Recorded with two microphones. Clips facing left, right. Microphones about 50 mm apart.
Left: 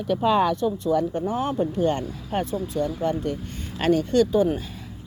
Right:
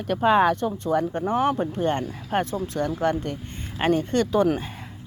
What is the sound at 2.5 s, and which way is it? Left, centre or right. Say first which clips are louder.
Speech: even; right.